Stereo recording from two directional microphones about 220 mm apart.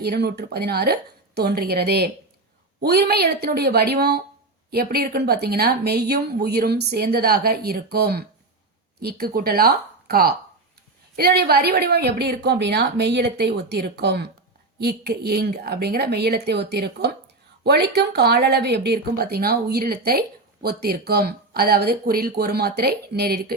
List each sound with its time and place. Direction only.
0.0 s speech: 45° right (ahead or behind)